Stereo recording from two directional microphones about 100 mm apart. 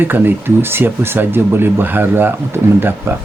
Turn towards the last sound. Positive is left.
turn(degrees=-25)  # may be behind; listen again after turning